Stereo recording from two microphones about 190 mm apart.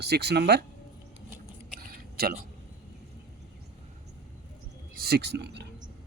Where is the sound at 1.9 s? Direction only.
50° right (ahead or behind).